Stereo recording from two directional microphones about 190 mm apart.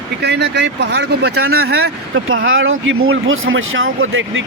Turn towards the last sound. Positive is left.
turn(degrees=-90)